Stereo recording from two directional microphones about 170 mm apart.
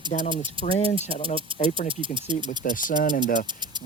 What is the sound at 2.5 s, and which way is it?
Speech, 50° left (ahead or behind).